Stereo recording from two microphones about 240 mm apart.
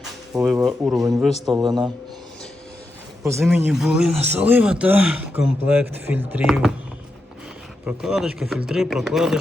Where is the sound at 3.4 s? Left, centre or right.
Centre.